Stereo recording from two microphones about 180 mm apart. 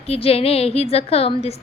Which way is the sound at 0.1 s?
35° left (ahead or behind).